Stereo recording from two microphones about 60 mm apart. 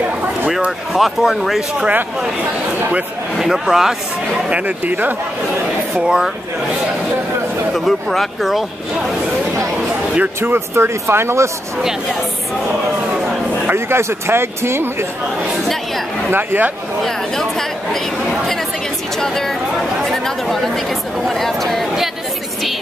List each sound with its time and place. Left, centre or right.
0.7 s speech: centre
3.3 s speech: centre
4.5 s speech: right
5.9 s speech: centre
7.7 s speech: centre
10.1 s speech: right
10.5 s speech: right
13.7 s speech: right
16.3 s speech: right
17.0 s speech: centre
19.1 s speech: centre